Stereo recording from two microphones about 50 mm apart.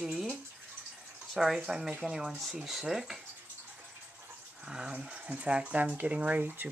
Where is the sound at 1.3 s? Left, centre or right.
Centre.